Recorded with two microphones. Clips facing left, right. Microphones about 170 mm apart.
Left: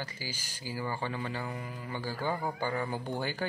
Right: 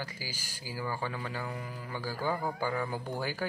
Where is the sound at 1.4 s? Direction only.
Centre (ahead or behind).